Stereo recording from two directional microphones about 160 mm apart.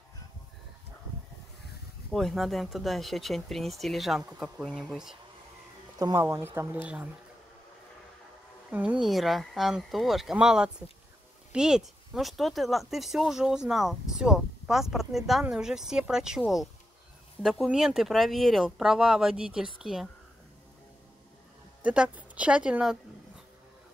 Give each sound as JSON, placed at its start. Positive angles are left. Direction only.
{"t": 2.1, "sound": "speech", "side_deg": 0}
{"t": 5.9, "sound": "speech", "side_deg": -20}
{"t": 8.6, "sound": "a woman's voice", "side_deg": -10}
{"t": 21.8, "sound": "speech", "side_deg": -10}